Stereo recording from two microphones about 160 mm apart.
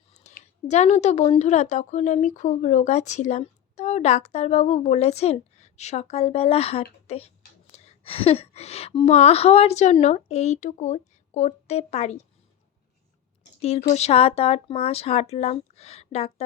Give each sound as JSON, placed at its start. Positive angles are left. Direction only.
{"t": 0.1, "sound": "a sound", "side_deg": 45}
{"t": 0.7, "sound": "a woman's voice", "side_deg": 45}
{"t": 13.6, "sound": "a woman's voice", "side_deg": 40}